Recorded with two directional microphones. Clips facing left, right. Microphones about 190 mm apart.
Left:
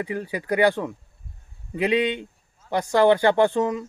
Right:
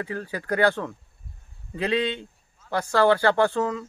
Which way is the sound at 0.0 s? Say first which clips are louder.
Left 3 dB; 15° left (ahead or behind).